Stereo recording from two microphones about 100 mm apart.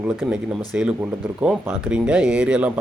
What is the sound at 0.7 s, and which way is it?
Speech, 10° right (ahead or behind).